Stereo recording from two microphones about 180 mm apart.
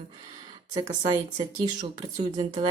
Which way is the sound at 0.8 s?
20° right (ahead or behind).